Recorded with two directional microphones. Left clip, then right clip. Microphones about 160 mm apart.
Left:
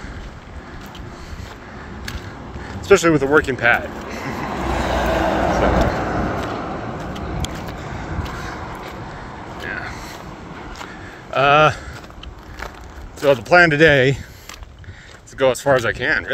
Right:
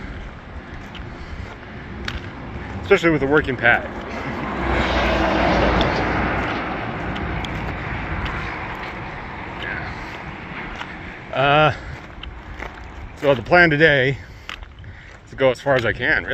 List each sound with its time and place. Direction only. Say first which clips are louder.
2.8 s a sound: left 3 dB; 65° left (ahead or behind); by 6.9 s 35° left (ahead or behind)
6.9 s vehicle: right 2 dB; 20° left (ahead or behind)
7.8 s vehicle: right 2 dB; 30° left (ahead or behind)
9.6 s a sound: left 1 dB; 50° left (ahead or behind)
11.3 s speech: left 3 dB; 55° left (ahead or behind)
13.2 s speech: left 2 dB; 55° left (ahead or behind)